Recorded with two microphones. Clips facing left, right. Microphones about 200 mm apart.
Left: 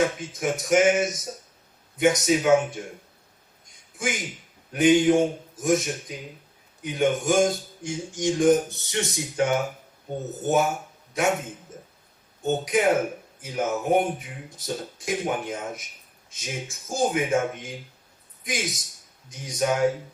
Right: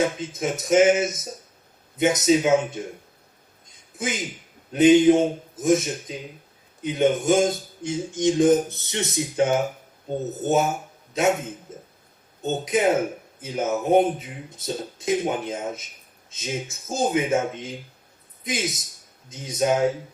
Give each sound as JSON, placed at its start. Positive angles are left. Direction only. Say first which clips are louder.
{"t": 0.2, "sound": "speech", "louder": "right 1 dB", "side_deg": -20}
{"t": 3.9, "sound": "speech", "louder": "right 1 dB", "side_deg": -20}
{"t": 11.7, "sound": "a sound", "louder": "right 2 dB", "side_deg": -20}
{"t": 12.4, "sound": "a man's voice", "louder": "even", "side_deg": -20}